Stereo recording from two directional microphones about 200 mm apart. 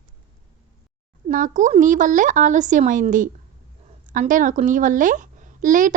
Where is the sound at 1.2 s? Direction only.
40° right (ahead or behind).